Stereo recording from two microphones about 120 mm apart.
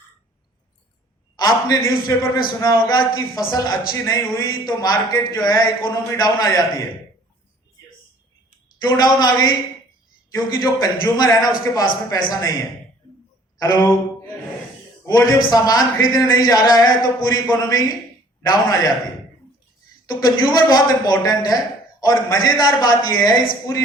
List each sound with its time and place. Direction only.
1.4 s a man's voice: 35° left (ahead or behind)
9.0 s a man's voice: 35° left (ahead or behind)
15.0 s a man's voice: 30° left (ahead or behind)
20.1 s a man's voice: 35° left (ahead or behind)